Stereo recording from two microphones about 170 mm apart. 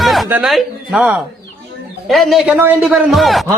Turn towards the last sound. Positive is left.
turn(degrees=0)  # may be behind; listen again after turning